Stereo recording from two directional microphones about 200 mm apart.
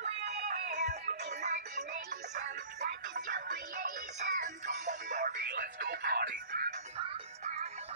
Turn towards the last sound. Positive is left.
turn(degrees=-35)  # may be behind; listen again after turning